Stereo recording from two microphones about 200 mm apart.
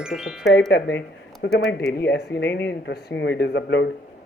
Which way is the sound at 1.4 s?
65° left (ahead or behind).